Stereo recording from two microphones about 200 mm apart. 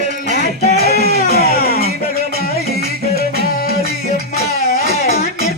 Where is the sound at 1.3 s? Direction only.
50° left (ahead or behind).